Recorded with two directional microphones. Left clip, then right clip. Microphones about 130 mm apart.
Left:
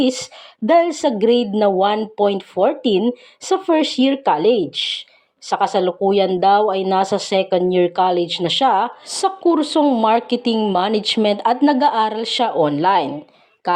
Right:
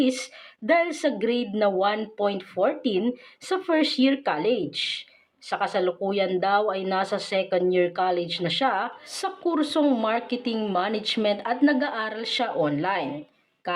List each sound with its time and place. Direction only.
0.0 s speech: 40° left (ahead or behind)
10.1 s speech: 45° left (ahead or behind)